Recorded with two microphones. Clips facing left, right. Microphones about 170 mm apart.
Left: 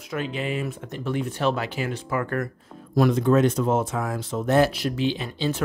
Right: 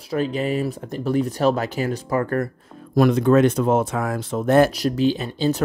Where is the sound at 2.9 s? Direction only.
55° right (ahead or behind).